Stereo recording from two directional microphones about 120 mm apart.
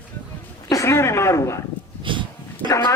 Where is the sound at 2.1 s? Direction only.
45° right (ahead or behind).